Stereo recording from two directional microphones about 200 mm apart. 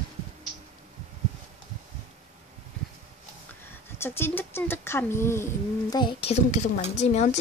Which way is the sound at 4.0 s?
10° left (ahead or behind).